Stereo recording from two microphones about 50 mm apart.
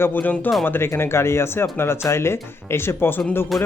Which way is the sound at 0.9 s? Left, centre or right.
Left.